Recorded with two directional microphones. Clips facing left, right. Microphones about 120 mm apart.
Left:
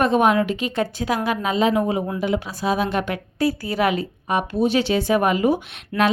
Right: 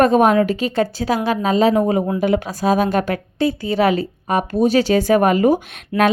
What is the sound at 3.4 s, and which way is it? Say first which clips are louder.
A woman's voice: right 3 dB; 25° right (ahead or behind).